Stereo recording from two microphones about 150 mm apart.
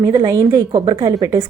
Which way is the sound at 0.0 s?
20° right (ahead or behind).